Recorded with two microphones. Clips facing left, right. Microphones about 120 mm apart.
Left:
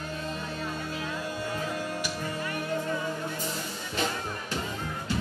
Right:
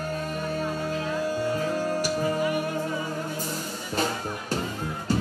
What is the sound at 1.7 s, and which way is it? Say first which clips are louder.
Music: right 7 dB; 40° right (ahead or behind).